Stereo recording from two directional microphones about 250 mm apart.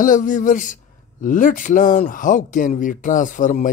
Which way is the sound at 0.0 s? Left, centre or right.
Left.